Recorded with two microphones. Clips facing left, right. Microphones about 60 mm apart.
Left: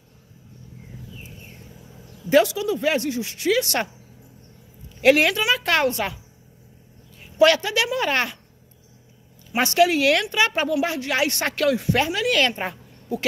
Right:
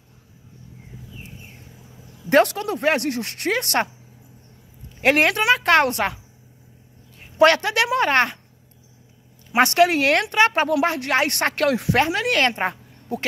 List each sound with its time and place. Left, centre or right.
2.2 s speech: right
5.0 s speech: right
7.2 s speech: right
9.5 s speech: right
11.7 s speech: right